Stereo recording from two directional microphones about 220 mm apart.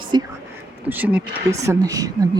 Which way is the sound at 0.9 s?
5° right (ahead or behind).